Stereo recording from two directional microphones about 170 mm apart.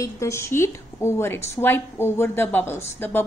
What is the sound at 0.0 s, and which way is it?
A woman's voice, 15° left (ahead or behind).